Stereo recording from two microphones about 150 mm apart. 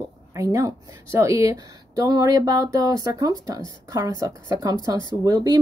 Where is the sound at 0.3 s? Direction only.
20° right (ahead or behind).